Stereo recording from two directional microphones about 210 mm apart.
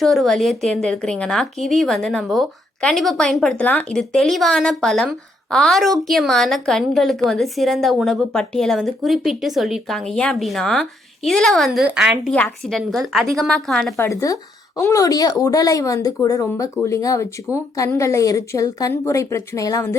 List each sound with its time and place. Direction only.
0.0 s a woman's voice: centre (ahead or behind)
13.9 s a woman's voice: 15° left (ahead or behind)